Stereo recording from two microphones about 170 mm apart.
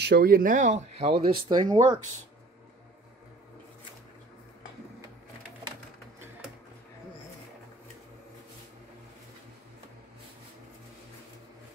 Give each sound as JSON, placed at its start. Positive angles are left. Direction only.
{"t": 0.0, "sound": "speech", "side_deg": -65}